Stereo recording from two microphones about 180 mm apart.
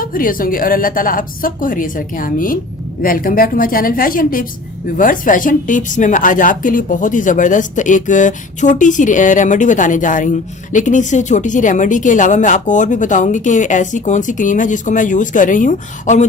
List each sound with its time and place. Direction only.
0.0 s a woman's voice: 50° left (ahead or behind)